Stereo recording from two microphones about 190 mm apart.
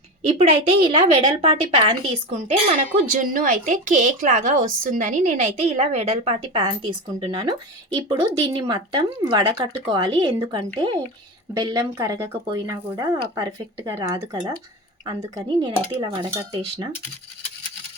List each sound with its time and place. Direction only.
0.3 s a woman's voice: 30° right (ahead or behind)
3.2 s a woman's voice: 45° right (ahead or behind); by 16.9 s 25° right (ahead or behind)